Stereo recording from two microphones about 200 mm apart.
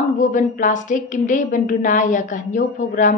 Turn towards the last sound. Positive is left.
turn(degrees=40)  # may be behind; listen again after turning